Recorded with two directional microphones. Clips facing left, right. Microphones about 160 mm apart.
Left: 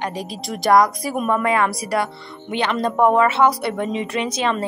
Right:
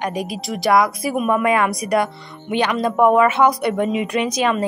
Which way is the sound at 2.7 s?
5° right (ahead or behind).